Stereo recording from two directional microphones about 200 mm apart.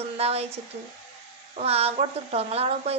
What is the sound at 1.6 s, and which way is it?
Speech, 30° right (ahead or behind).